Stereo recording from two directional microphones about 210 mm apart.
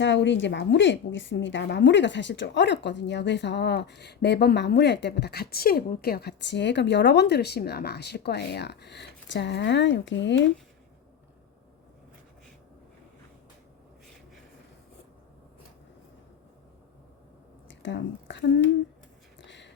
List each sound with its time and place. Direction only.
0.0 s a woman's voice: 60° left (ahead or behind)
17.7 s speech: 60° left (ahead or behind)
19.4 s a sound: 55° left (ahead or behind)